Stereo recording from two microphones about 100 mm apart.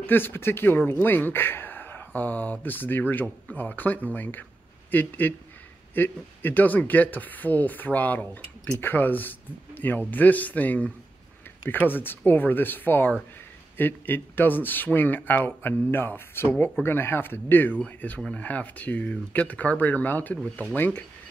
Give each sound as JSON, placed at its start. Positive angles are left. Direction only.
{"t": 0.0, "sound": "speech", "side_deg": 20}